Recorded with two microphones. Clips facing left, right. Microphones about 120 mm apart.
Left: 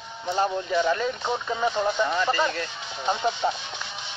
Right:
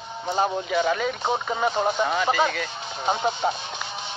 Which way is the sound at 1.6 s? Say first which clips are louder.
Even; 45° right (ahead or behind).